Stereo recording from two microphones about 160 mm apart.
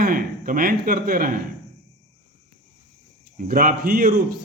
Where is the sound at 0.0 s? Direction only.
60° right (ahead or behind).